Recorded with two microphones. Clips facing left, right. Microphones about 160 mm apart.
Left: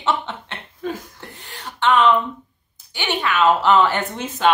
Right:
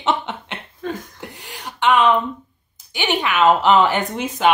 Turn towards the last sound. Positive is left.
turn(degrees=-15)  # may be behind; listen again after turning